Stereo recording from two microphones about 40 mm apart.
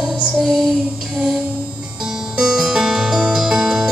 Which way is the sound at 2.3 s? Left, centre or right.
Centre.